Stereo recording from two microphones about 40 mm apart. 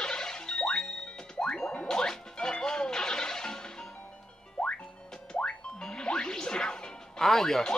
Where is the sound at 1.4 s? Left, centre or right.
Centre.